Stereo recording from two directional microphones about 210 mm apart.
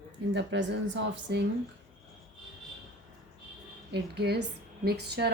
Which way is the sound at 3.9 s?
50° right (ahead or behind).